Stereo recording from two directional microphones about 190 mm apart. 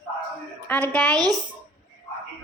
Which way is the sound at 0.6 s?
10° left (ahead or behind).